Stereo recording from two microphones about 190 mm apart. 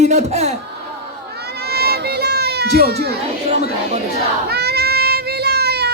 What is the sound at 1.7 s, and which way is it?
Baby cry, 55° right (ahead or behind).